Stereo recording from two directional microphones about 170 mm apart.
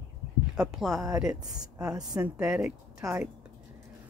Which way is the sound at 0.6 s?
5° right (ahead or behind).